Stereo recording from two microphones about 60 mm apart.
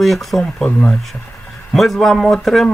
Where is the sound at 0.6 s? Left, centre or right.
Centre.